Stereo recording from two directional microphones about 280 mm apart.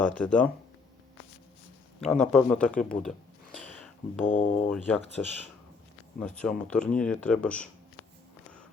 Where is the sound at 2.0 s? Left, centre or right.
Centre.